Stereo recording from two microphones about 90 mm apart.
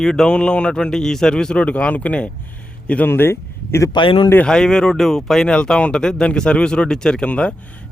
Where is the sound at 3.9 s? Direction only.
65° left (ahead or behind).